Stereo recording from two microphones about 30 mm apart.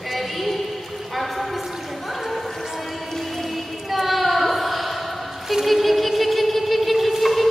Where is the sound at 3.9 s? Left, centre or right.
Centre.